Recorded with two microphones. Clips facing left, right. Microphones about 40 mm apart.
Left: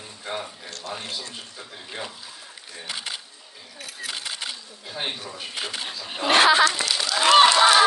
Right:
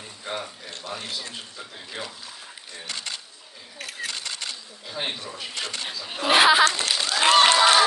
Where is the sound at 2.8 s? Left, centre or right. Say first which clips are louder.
Left 1 dB; centre.